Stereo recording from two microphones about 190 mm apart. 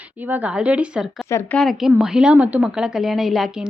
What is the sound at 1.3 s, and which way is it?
A woman's voice, 5° left (ahead or behind).